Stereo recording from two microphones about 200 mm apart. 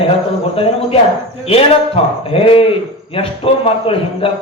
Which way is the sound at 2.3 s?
30° left (ahead or behind).